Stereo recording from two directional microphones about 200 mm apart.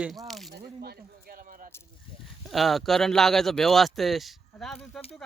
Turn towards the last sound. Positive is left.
turn(degrees=0)  # may be behind; listen again after turning